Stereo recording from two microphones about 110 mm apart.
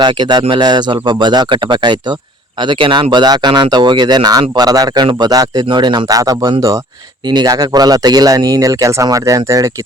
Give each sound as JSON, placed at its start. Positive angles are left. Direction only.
{"t": 0.0, "sound": "speech", "side_deg": -40}